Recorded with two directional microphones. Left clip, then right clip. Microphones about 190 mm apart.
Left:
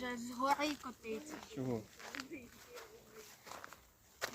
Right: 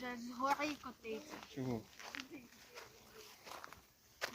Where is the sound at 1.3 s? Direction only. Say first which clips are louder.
Left 2 dB; 15° right (ahead or behind).